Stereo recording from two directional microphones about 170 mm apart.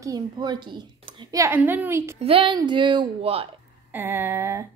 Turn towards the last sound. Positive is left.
turn(degrees=-15)  # may be behind; listen again after turning